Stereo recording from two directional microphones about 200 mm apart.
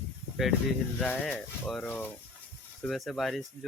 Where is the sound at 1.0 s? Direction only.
5° left (ahead or behind).